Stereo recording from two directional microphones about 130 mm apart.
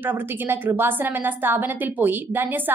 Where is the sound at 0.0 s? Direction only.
15° right (ahead or behind).